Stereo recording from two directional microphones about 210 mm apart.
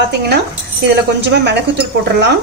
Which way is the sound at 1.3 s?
55° right (ahead or behind).